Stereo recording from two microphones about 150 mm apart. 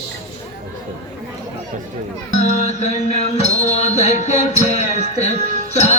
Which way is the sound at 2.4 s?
50° left (ahead or behind).